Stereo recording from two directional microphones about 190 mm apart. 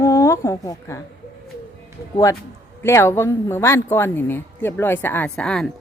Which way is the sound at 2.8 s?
15° left (ahead or behind).